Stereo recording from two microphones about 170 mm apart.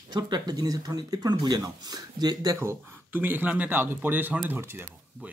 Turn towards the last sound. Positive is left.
turn(degrees=-10)  # may be behind; listen again after turning